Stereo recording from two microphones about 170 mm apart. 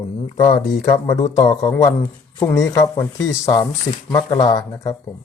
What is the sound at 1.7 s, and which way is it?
Speech, 15° left (ahead or behind).